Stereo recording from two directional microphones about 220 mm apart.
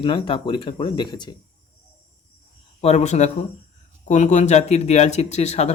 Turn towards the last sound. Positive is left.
turn(degrees=30)  # may be behind; listen again after turning